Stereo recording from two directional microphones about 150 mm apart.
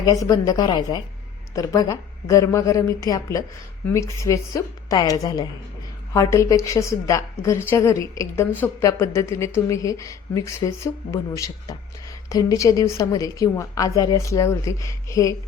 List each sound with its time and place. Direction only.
0.0 s a woman's voice: 25° left (ahead or behind)